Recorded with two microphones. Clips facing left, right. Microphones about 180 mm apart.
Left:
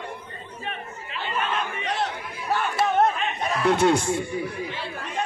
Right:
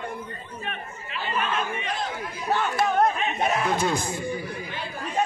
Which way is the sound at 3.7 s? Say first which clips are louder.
Left 6 dB; 70° left (ahead or behind).